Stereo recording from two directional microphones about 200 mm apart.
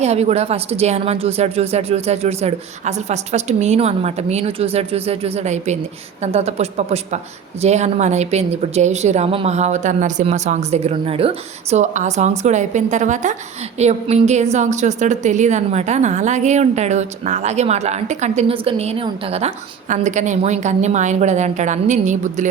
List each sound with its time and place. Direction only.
0.0 s a woman's voice: 30° right (ahead or behind)